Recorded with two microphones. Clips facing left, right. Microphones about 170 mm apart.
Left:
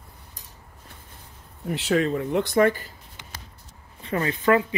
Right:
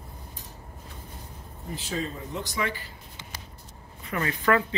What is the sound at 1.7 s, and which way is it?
Speech, 75° left (ahead or behind).